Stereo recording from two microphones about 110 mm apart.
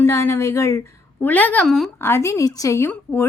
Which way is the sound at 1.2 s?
15° left (ahead or behind).